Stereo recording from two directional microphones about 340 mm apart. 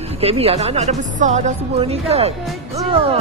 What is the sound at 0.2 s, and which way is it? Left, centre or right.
A woman's voice, centre.